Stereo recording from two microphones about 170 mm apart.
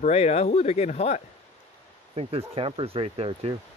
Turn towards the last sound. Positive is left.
turn(degrees=-35)  # may be behind; listen again after turning